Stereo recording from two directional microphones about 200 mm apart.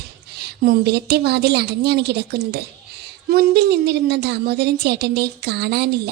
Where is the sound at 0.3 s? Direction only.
50° right (ahead or behind).